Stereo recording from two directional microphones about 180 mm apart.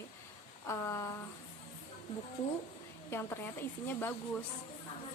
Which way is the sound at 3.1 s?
15° left (ahead or behind).